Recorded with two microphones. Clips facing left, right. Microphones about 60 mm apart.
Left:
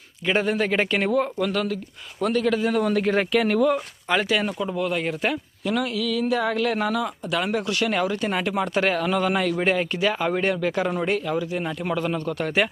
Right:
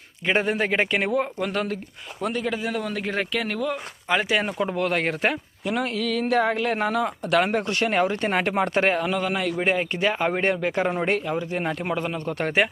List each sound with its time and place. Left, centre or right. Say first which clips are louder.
0.3 s speech: even; right
0.7 s speech: left 1 dB; centre
2.6 s speech: left 6 dB; centre
4.1 s speech: even; right
5.3 s speech: left 1 dB; right
5.8 s speech: right 2 dB; right
6.4 s speech: even; right
7.3 s speech: right 4 dB; right
9.1 s speech: left 3 dB; centre
9.6 s speech: left 1 dB; right
11.8 s speech: left 2 dB; right
12.2 s speech: even; right